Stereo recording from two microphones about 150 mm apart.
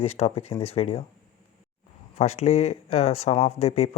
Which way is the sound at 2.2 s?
45° left (ahead or behind).